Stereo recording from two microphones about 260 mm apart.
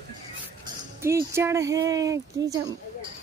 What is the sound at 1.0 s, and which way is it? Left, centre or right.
Speech, centre.